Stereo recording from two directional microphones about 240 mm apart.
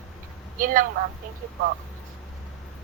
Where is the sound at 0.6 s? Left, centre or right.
Right.